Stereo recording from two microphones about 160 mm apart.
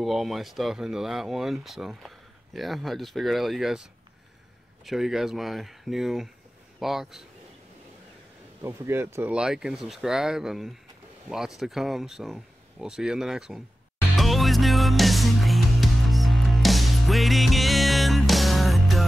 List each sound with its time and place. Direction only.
0.0 s speech: centre (ahead or behind)
8.6 s speech: 15° right (ahead or behind)
14.1 s music: centre (ahead or behind)